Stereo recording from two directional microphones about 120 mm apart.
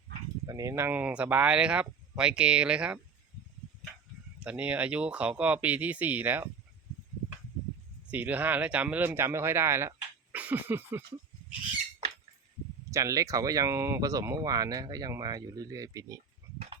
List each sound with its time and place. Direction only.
0.4 s speech: 30° right (ahead or behind); by 3.0 s 10° right (ahead or behind)
4.4 s speech: 10° right (ahead or behind)
8.1 s speech: 15° right (ahead or behind)
10.3 s a sound: 15° right (ahead or behind)
12.9 s speech: 30° right (ahead or behind)